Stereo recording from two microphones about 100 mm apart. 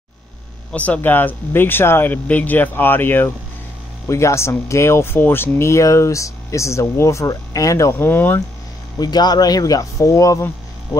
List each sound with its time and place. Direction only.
0.7 s speech: 15° left (ahead or behind); by 7.9 s 35° left (ahead or behind)
8.0 s speech: 20° left (ahead or behind)
9.0 s speech: 40° left (ahead or behind)